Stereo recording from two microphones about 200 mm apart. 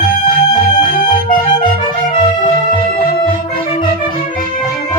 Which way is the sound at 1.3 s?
25° left (ahead or behind).